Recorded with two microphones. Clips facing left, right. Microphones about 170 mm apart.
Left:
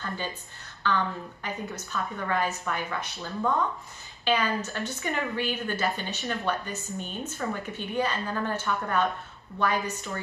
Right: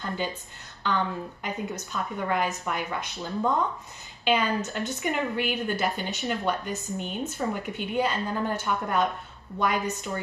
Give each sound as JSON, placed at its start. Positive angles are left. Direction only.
{"t": 1.4, "sound": "a woman's voice", "side_deg": -15}